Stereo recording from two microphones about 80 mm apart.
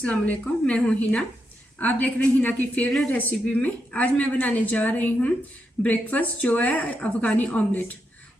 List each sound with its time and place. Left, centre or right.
0.0 s a woman's voice: centre